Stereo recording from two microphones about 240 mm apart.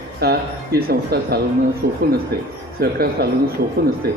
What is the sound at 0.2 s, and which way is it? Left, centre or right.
Speech, right.